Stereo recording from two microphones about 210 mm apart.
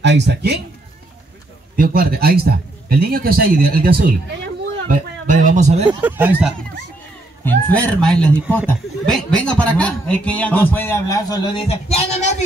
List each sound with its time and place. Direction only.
0.0 s speech: 55° right (ahead or behind)
1.8 s speech: 45° right (ahead or behind)
6.0 s speech: 10° right (ahead or behind)
7.4 s speech: 5° left (ahead or behind); by 12.4 s 35° left (ahead or behind)